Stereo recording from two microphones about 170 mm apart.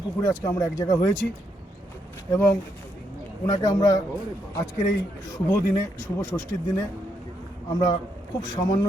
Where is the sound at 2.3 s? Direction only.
15° left (ahead or behind).